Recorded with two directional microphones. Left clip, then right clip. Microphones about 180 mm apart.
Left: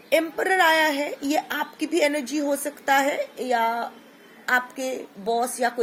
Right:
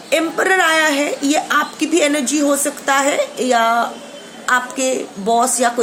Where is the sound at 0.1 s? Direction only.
20° left (ahead or behind).